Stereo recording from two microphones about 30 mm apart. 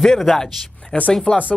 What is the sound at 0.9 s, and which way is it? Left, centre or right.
Speech, left.